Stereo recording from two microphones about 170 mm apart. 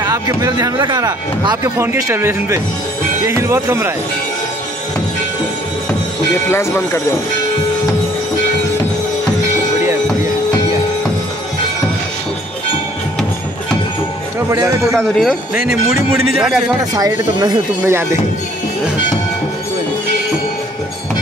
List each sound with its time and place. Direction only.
0.0 s speech: 20° right (ahead or behind)
6.5 s speech: 15° left (ahead or behind)
14.5 s speech: 20° right (ahead or behind)
15.0 s speech: centre (ahead or behind)
16.9 s speech: 25° right (ahead or behind)